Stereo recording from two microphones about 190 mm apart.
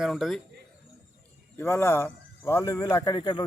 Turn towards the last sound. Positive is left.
turn(degrees=25)  # may be behind; listen again after turning